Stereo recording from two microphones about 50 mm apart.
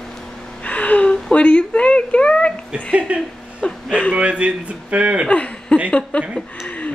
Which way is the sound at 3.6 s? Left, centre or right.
Left.